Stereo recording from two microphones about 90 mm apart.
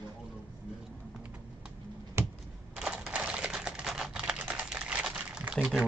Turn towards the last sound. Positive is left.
turn(degrees=-10)  # may be behind; listen again after turning